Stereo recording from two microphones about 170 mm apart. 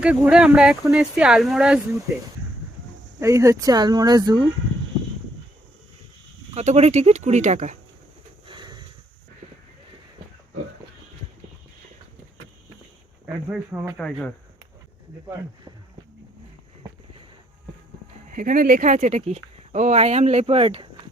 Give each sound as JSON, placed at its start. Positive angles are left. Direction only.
{"t": 0.0, "sound": "speech", "side_deg": -5}
{"t": 3.2, "sound": "speech", "side_deg": -15}
{"t": 6.5, "sound": "speech", "side_deg": -40}
{"t": 8.4, "sound": "horse", "side_deg": -25}
{"t": 13.2, "sound": "speech", "side_deg": -10}
{"t": 13.9, "sound": "speech", "side_deg": 5}
{"t": 18.3, "sound": "speech", "side_deg": -55}